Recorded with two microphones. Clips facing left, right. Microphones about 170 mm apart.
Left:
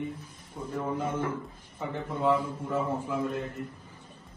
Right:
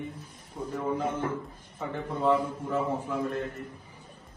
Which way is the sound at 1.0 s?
25° right (ahead or behind).